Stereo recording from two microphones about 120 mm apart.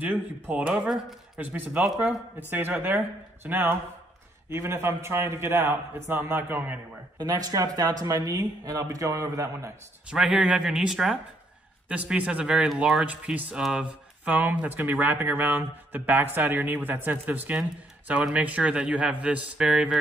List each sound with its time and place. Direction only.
0.0 s speech: 15° right (ahead or behind)
2.5 s a man's voice: 15° right (ahead or behind)
7.2 s speech: 30° right (ahead or behind)
10.0 s speech: 5° right (ahead or behind)